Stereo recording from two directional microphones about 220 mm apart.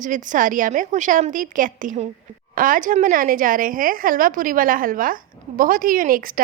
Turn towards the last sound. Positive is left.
turn(degrees=-40)  # may be behind; listen again after turning